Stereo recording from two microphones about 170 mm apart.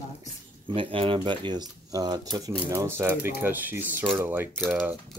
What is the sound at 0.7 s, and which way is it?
Speech, 30° right (ahead or behind).